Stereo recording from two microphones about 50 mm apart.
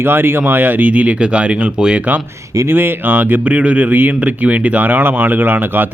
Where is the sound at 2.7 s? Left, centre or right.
Right.